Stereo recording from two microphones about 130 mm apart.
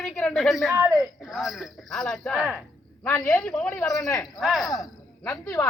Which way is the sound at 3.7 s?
25° left (ahead or behind).